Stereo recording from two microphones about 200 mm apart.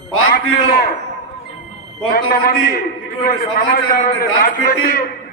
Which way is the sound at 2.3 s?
50° left (ahead or behind).